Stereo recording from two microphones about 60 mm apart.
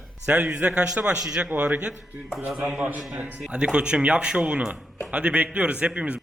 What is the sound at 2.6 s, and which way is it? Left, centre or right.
A man's voice, right.